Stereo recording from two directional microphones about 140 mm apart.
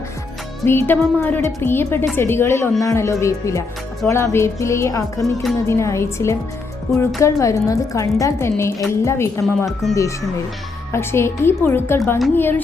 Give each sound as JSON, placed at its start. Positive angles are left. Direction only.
{"t": 0.6, "sound": "a woman's voice", "side_deg": 15}
{"t": 5.2, "sound": "speech", "side_deg": 0}
{"t": 5.6, "sound": "a woman's voice", "side_deg": 20}
{"t": 9.8, "sound": "speech", "side_deg": 0}
{"t": 10.9, "sound": "a woman's voice", "side_deg": 20}